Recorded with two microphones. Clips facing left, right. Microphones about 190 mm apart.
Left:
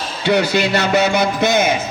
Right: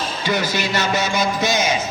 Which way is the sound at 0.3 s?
65° left (ahead or behind).